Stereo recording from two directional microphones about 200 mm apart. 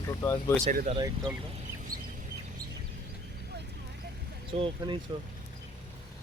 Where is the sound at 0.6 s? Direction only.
45° right (ahead or behind).